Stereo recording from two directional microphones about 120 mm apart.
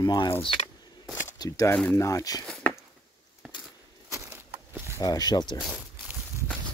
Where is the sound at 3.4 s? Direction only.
5° right (ahead or behind).